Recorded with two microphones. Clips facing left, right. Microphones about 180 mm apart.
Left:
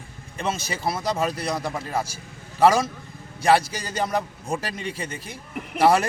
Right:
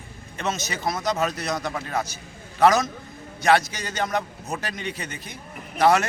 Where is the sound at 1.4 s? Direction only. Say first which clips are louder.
Left 1 dB; 10° left (ahead or behind).